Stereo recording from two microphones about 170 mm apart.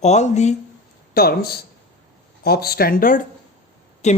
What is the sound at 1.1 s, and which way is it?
Speech, 65° left (ahead or behind).